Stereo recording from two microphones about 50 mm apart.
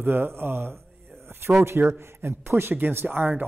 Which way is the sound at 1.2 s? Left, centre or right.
Right.